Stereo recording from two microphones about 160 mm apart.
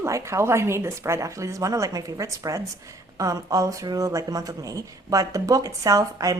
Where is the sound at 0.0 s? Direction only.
20° right (ahead or behind).